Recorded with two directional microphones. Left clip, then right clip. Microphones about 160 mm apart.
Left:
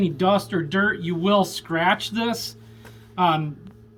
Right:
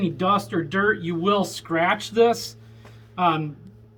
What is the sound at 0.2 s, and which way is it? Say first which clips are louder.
A man's voice: even; 15° right (ahead or behind).